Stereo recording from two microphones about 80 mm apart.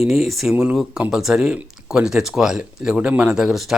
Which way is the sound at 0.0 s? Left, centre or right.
Centre.